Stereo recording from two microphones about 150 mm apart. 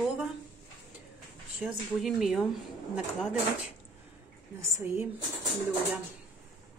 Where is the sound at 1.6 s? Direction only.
Centre (ahead or behind).